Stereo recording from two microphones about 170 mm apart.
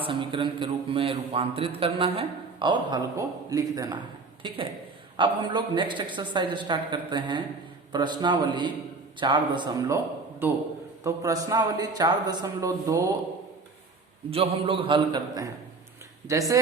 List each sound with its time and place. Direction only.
0.0 s a man's voice: 30° right (ahead or behind)
11.0 s a man's voice: 20° right (ahead or behind)
14.3 s a man's voice: 35° right (ahead or behind); by 16.6 s 20° right (ahead or behind)